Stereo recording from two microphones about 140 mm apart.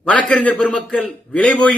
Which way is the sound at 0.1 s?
10° left (ahead or behind).